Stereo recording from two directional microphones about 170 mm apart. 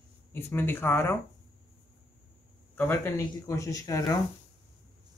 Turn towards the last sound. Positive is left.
turn(degrees=20)  # may be behind; listen again after turning